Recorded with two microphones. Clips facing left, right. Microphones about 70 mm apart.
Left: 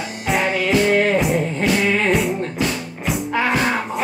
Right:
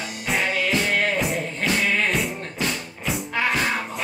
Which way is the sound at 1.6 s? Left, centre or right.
Left.